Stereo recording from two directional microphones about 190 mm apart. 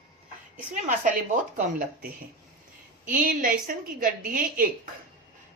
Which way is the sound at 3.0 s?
45° right (ahead or behind).